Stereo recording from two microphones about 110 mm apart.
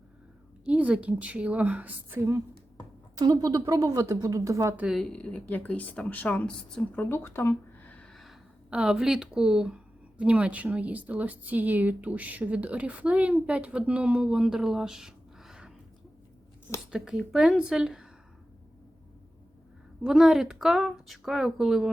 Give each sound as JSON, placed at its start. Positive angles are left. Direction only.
{"t": 0.6, "sound": "a woman's voice", "side_deg": -10}
{"t": 3.2, "sound": "a woman's voice", "side_deg": -35}
{"t": 4.9, "sound": "speech", "side_deg": 0}
{"t": 7.0, "sound": "speech", "side_deg": 25}
{"t": 8.1, "sound": "speech", "side_deg": 0}
{"t": 16.9, "sound": "a woman's voice", "side_deg": -5}
{"t": 20.0, "sound": "a woman's voice", "side_deg": -5}